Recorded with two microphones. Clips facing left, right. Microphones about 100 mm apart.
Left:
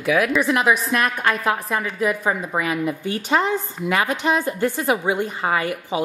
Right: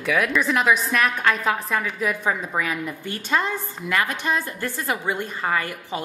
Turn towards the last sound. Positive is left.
turn(degrees=10)  # may be behind; listen again after turning